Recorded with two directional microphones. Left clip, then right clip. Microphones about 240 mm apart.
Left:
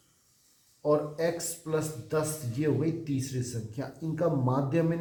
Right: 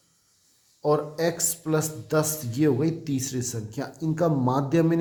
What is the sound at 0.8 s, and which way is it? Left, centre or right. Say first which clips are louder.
A man's voice: right 3 dB; right.